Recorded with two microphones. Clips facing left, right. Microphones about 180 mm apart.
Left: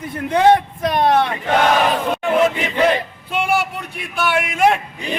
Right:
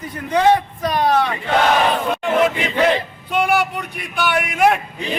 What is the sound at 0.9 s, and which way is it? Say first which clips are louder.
Speech: left 1 dB; 25° left (ahead or behind).